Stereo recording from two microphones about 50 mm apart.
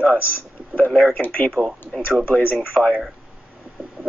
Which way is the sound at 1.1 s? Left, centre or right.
Left.